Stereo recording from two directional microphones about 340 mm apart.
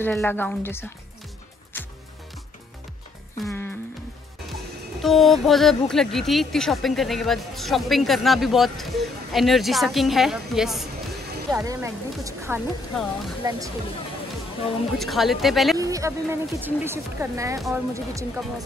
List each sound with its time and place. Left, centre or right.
0.0 s speech: centre
1.7 s music: centre
3.3 s music: centre
5.0 s speech: centre
15.0 s speech: centre